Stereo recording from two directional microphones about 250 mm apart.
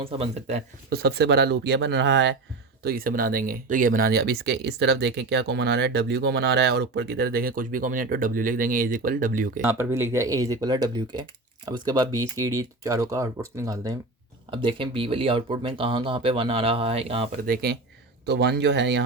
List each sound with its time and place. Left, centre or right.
0.0 s speech: right
0.9 s speech: right
9.6 s speech: centre
17.4 s speech: right